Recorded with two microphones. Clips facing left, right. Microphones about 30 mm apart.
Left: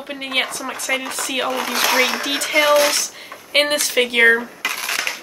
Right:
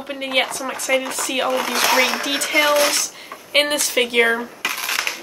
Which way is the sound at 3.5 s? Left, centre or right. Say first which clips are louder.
Left 1 dB; centre.